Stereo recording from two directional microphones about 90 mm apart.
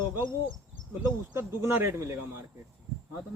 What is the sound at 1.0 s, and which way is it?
Speech, 30° right (ahead or behind).